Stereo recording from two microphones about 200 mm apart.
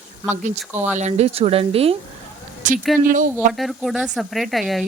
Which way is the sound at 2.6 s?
40° right (ahead or behind).